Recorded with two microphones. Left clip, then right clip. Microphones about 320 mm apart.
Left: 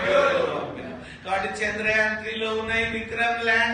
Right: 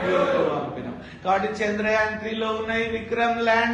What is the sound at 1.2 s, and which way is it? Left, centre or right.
A man's voice, centre.